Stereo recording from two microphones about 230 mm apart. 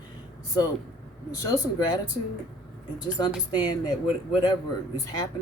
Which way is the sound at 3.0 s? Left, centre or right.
Centre.